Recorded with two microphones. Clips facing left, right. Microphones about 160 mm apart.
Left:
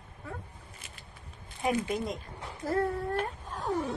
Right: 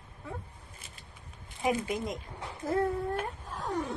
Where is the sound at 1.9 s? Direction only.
20° right (ahead or behind).